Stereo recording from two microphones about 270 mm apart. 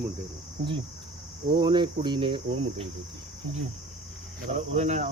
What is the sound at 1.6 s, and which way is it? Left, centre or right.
Speech, centre.